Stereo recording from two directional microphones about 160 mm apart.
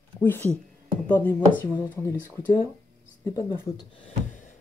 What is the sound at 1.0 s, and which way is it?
Speech, 10° left (ahead or behind).